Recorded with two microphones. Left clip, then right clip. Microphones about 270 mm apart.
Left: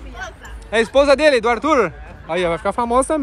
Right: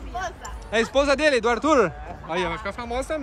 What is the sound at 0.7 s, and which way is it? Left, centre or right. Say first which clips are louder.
Speech: left 7 dB; centre.